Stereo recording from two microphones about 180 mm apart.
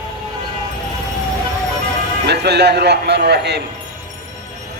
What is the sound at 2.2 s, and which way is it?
A woman's voice, 65° right (ahead or behind).